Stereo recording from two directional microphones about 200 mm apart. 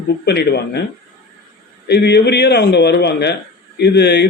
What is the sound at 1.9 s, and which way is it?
A man's voice, 55° left (ahead or behind).